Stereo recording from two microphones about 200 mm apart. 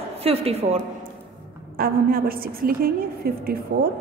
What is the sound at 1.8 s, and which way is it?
A woman's voice, 45° right (ahead or behind).